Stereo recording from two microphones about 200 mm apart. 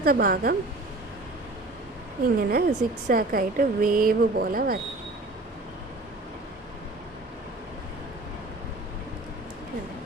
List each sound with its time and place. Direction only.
0.0 s a woman's voice: 50° right (ahead or behind)
2.2 s a woman's voice: 50° right (ahead or behind)